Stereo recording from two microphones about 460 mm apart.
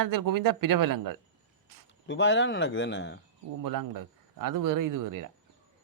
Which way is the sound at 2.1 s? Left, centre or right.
Left.